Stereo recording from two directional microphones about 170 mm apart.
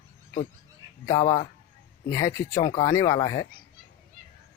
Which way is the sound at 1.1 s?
20° left (ahead or behind).